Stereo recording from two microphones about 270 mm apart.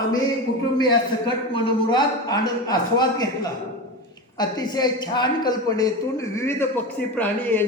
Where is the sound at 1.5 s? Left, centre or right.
Centre.